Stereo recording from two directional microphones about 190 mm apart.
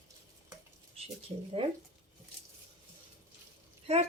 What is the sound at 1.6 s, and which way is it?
Speech, 25° right (ahead or behind).